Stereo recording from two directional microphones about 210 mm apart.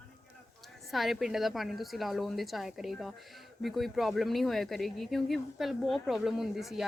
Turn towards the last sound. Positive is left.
turn(degrees=0)  # may be behind; listen again after turning